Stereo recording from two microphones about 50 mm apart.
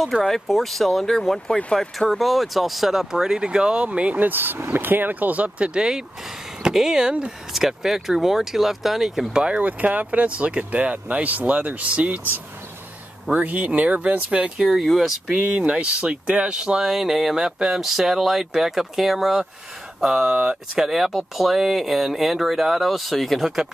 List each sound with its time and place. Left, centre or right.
0.0 s speech: centre; by 4.3 s right
4.3 s speech: right; by 7.1 s centre
7.1 s speech: centre
7.5 s speech: centre
9.6 s speech: right
13.3 s speech: right
14.7 s speech: centre
15.3 s speech: right
15.7 s speech: centre
16.8 s speech: centre; by 20.8 s right
20.8 s speech: centre